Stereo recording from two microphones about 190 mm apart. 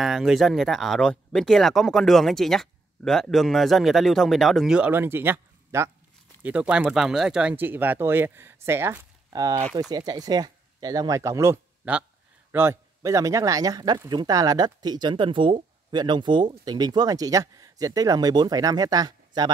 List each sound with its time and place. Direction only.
0.0 s speech: centre (ahead or behind); by 19.5 s 20° right (ahead or behind)